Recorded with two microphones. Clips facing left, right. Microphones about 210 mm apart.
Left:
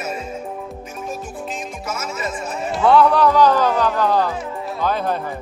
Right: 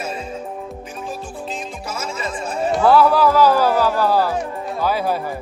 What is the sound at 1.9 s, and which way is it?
Music, 30° right (ahead or behind).